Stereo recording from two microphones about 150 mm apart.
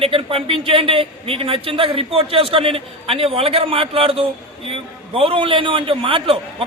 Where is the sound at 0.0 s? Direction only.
40° right (ahead or behind).